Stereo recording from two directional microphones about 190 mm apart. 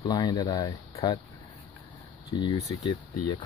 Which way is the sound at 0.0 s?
20° left (ahead or behind).